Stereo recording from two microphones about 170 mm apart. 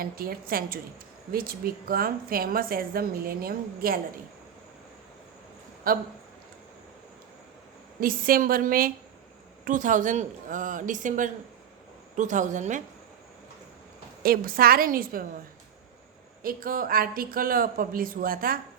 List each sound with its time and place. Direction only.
0.0 s a woman's voice: 60° right (ahead or behind)
5.9 s a woman's voice: 60° right (ahead or behind)
8.0 s a woman's voice: 55° right (ahead or behind)
14.2 s a woman's voice: 60° right (ahead or behind)
16.4 s a woman's voice: 55° right (ahead or behind)